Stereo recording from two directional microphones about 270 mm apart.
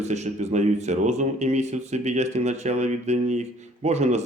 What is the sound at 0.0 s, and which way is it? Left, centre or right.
Speech, right.